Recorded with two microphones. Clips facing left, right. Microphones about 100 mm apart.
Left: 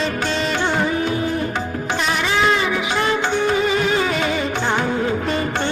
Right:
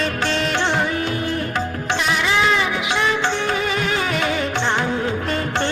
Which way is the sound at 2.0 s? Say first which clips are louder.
Even; 55° left (ahead or behind).